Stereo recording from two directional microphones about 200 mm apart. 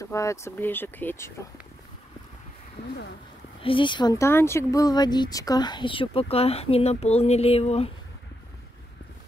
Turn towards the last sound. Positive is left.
turn(degrees=30)  # may be behind; listen again after turning